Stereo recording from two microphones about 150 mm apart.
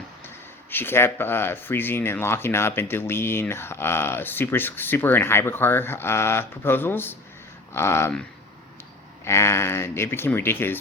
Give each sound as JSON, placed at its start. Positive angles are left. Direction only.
{"t": 0.7, "sound": "speech", "side_deg": 15}
{"t": 9.2, "sound": "speech", "side_deg": 15}